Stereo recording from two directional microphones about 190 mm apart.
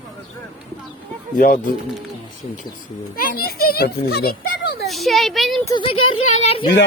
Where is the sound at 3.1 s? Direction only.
50° left (ahead or behind).